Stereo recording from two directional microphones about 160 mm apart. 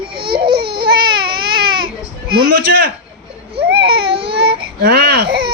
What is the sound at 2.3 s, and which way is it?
Speech, 85° right.